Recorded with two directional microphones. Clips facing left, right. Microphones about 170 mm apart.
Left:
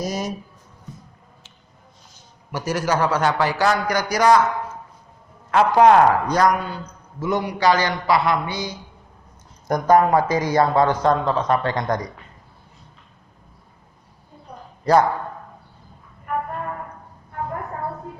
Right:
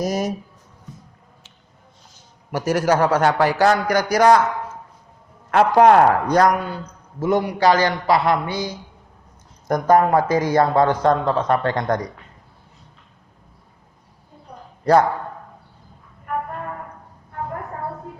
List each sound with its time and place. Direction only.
0.0 s a sound: 50° right (ahead or behind)
2.5 s speech: 60° right (ahead or behind)
5.5 s a man's voice: 55° right (ahead or behind)
14.8 s a man's voice: 55° right (ahead or behind)